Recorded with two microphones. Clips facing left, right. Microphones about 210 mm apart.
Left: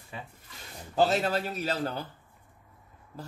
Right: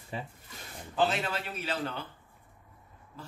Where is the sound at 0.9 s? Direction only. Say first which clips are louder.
Left 4 dB; 40° left (ahead or behind).